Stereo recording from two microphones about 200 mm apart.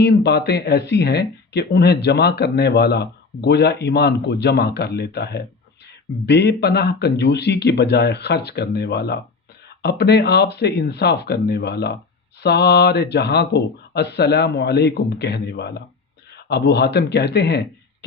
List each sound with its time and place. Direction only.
0.0 s speech: 55° left (ahead or behind)